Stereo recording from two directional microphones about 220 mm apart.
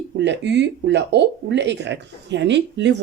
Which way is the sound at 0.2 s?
50° right (ahead or behind).